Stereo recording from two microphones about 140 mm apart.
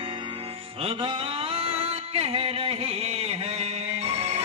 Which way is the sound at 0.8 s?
40° right (ahead or behind).